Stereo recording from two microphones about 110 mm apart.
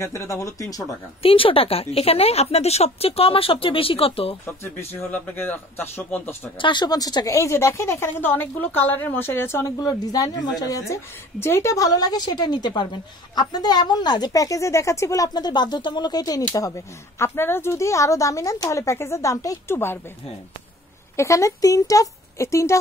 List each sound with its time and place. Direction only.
0.0 s a woman's voice: 25° left (ahead or behind)
1.2 s a woman's voice: 55° left (ahead or behind)
4.5 s speech: 20° left (ahead or behind)
6.6 s a woman's voice: 45° left (ahead or behind); by 9.8 s 25° left (ahead or behind)
9.8 s a woman's voice: 35° left (ahead or behind)
11.3 s a woman's voice: 25° left (ahead or behind)
21.2 s a woman's voice: 30° left (ahead or behind)